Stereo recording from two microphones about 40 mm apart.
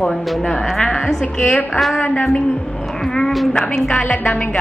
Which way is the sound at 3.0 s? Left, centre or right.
Centre.